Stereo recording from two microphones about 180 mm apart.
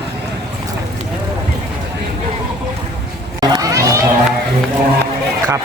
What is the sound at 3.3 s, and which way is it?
Run, 20° right (ahead or behind).